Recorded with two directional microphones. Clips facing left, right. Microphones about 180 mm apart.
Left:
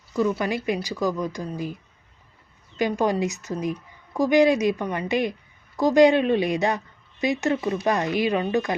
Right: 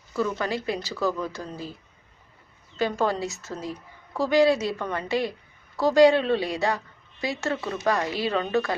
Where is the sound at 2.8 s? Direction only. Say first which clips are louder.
Left 3 dB; 15° left (ahead or behind).